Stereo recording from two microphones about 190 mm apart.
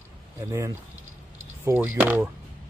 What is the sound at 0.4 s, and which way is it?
A man's voice, 20° right (ahead or behind).